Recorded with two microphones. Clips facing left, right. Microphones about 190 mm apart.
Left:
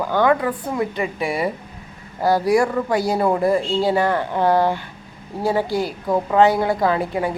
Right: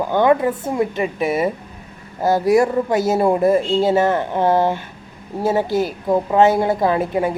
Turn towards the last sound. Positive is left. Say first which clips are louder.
# right 2 dB
turn(degrees=-20)  # may be behind; listen again after turning